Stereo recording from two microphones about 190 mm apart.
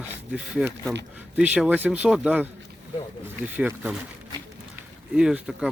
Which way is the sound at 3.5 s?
10° right (ahead or behind).